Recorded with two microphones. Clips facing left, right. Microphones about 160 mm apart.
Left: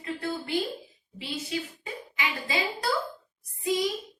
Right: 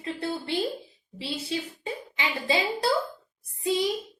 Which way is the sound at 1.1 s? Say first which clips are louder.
Right 2 dB; 30° right (ahead or behind).